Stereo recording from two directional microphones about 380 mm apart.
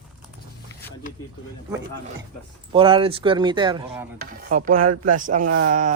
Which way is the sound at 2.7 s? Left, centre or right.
Centre.